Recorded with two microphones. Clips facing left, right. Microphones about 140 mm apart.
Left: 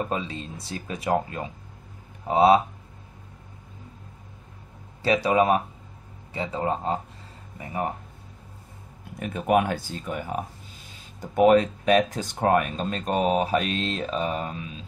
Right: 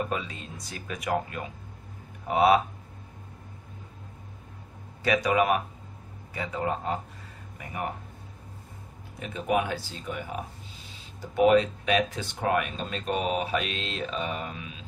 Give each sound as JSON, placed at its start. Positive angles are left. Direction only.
{"t": 0.1, "sound": "speech", "side_deg": 30}
{"t": 5.0, "sound": "speech", "side_deg": 30}
{"t": 9.3, "sound": "speech", "side_deg": 50}